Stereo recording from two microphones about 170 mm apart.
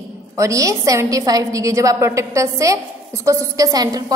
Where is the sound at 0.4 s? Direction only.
20° right (ahead or behind).